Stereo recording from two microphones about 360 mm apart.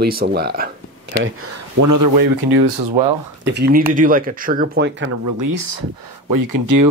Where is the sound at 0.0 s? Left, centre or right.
Right.